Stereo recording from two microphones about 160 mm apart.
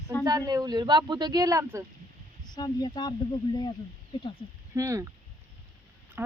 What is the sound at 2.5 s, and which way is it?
Speech, 25° left (ahead or behind).